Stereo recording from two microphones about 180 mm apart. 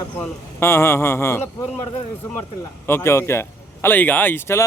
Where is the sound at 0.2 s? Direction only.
15° left (ahead or behind).